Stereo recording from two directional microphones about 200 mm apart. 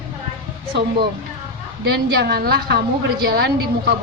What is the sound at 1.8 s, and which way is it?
A woman's voice, 55° right (ahead or behind).